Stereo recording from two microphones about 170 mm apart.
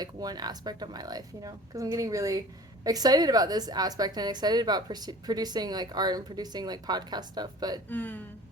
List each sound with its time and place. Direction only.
0.0 s a woman's voice: 25° right (ahead or behind)
7.9 s speech: 10° left (ahead or behind)